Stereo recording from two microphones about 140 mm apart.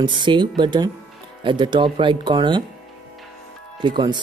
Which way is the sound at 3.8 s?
35° right (ahead or behind).